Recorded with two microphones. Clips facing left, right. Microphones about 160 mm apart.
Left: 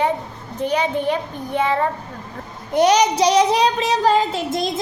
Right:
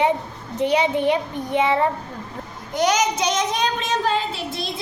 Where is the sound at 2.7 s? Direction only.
30° left (ahead or behind); by 4.8 s 45° left (ahead or behind).